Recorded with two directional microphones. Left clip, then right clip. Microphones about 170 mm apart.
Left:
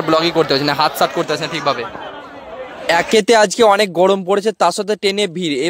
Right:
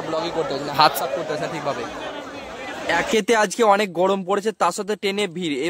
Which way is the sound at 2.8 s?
30° left (ahead or behind).